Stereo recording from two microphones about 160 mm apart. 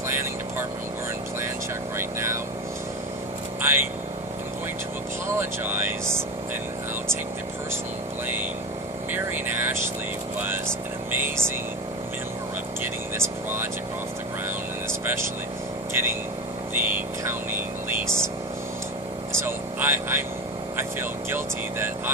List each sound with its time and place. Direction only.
0.1 s vehicle: 15° right (ahead or behind)
2.0 s vehicle: 15° right (ahead or behind)
3.6 s vehicle: 15° right (ahead or behind)
5.4 s vehicle: 10° right (ahead or behind)
9.1 s vehicle: 10° right (ahead or behind)
12.8 s vehicle: 15° right (ahead or behind)
15.0 s speech: 15° right (ahead or behind)
15.9 s vehicle: 15° right (ahead or behind)
19.4 s vehicle: 15° right (ahead or behind)